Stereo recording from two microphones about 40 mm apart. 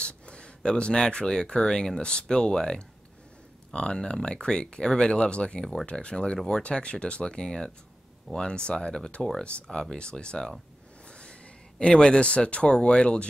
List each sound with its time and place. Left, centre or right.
0.0 s a sound: left
0.6 s a man's voice: left
9.4 s speech: left
9.7 s speech: centre
11.1 s a sound: left
11.8 s speech: left